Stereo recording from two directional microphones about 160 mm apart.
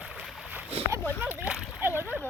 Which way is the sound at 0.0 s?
5° right (ahead or behind).